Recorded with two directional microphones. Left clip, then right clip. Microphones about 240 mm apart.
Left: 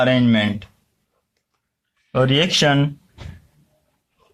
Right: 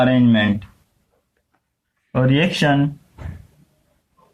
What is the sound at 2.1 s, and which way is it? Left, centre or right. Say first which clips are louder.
Speech: left 2 dB; left.